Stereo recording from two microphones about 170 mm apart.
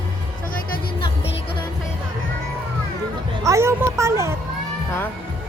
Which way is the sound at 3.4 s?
15° right (ahead or behind).